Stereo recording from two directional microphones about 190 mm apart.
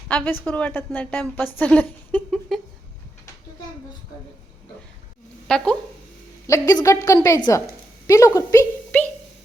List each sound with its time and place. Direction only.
0.1 s a woman's voice: 10° left (ahead or behind)
5.5 s speech: 5° left (ahead or behind)
6.5 s a woman's voice: 15° left (ahead or behind)